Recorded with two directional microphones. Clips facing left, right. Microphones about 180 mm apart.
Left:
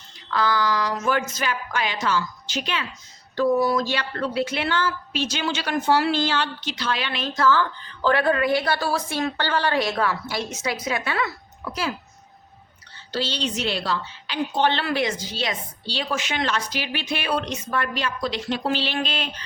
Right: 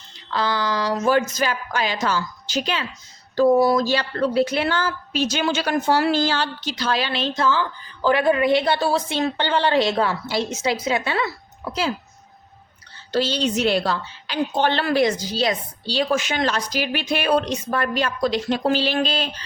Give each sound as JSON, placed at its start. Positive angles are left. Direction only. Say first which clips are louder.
{"t": 0.3, "sound": "a woman's voice", "louder": "left 1 dB", "side_deg": -30}
{"t": 13.1, "sound": "a woman's voice", "louder": "right 6 dB", "side_deg": -50}